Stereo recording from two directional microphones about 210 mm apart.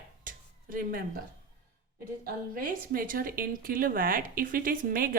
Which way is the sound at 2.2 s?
45° right (ahead or behind).